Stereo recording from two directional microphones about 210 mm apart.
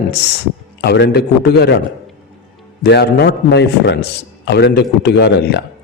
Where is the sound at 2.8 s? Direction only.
50° left (ahead or behind).